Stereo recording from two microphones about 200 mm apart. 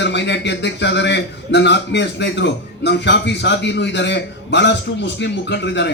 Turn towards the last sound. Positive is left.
turn(degrees=60)  # may be behind; listen again after turning